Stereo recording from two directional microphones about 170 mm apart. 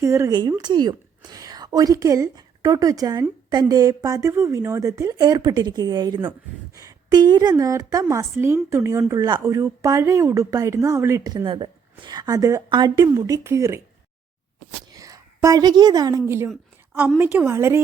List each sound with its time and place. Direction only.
0.0 s a woman's voice: 15° right (ahead or behind)
14.9 s a woman's voice: 20° right (ahead or behind)
16.5 s a sound: centre (ahead or behind)
17.3 s speech: 15° right (ahead or behind)